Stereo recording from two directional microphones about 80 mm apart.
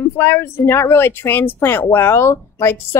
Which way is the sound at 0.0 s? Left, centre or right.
Left.